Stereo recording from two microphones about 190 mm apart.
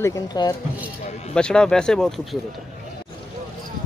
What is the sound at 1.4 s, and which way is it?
Speech, 5° left (ahead or behind).